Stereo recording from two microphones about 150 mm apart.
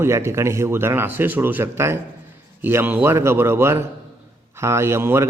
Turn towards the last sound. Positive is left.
turn(degrees=-15)  # may be behind; listen again after turning